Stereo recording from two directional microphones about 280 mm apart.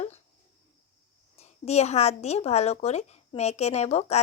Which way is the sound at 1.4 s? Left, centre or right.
Left.